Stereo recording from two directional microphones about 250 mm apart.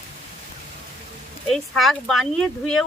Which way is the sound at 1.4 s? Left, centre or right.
Centre.